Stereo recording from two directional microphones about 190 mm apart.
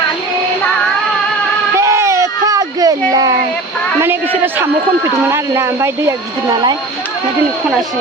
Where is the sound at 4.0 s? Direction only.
10° right (ahead or behind).